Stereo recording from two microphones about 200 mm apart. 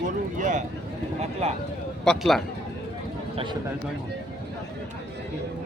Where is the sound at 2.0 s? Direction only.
Centre (ahead or behind).